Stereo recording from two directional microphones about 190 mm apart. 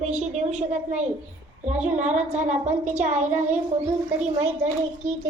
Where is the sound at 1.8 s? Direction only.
40° right (ahead or behind).